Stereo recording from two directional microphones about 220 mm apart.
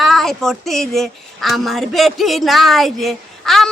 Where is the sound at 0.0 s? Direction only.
Centre (ahead or behind).